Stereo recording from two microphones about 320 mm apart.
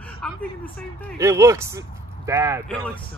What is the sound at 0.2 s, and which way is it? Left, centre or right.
Speech, centre.